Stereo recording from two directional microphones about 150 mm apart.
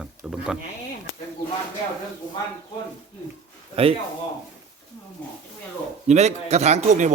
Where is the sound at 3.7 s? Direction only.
40° right (ahead or behind).